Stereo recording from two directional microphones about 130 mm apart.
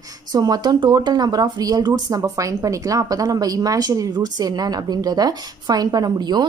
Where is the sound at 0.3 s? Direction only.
30° right (ahead or behind).